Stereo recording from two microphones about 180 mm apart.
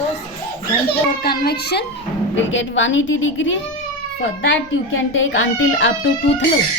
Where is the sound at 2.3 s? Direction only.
90° left.